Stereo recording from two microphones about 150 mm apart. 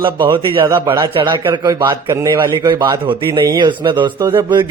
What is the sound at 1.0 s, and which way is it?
Speech, 30° right (ahead or behind).